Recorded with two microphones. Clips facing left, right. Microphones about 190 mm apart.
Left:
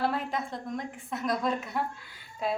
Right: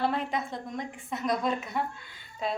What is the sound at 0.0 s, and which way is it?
A woman's voice, centre (ahead or behind).